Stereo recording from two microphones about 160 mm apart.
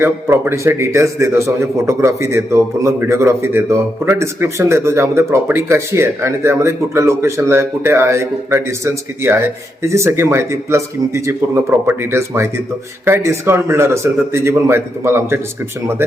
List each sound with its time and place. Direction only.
0.0 s speech: 15° right (ahead or behind)